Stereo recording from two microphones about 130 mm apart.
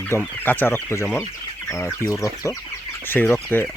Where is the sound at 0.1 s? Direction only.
20° left (ahead or behind).